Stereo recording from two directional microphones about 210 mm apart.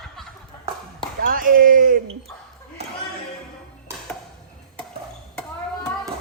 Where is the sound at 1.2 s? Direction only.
40° right (ahead or behind).